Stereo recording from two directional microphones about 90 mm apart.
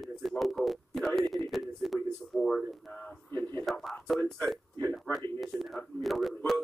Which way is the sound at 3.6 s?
Centre (ahead or behind).